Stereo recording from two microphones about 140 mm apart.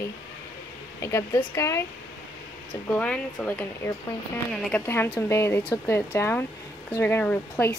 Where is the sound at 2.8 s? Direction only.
10° left (ahead or behind).